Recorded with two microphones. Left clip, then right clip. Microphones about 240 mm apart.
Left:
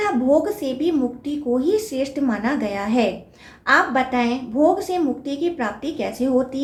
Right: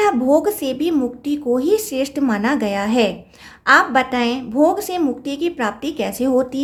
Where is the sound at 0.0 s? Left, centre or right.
Right.